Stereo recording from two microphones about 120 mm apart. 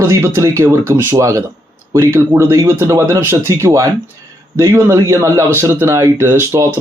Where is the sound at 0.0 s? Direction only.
25° right (ahead or behind).